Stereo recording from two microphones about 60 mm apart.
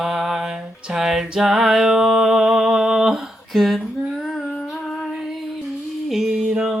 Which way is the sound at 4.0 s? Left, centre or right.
Centre.